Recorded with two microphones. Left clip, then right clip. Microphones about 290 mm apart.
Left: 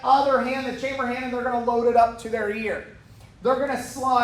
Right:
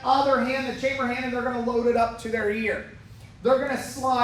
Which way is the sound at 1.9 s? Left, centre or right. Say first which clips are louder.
Left 4 dB; centre.